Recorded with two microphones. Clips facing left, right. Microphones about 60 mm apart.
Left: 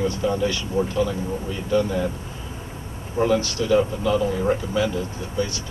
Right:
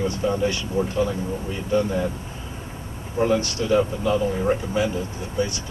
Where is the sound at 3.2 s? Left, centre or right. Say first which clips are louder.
Left 1 dB; right.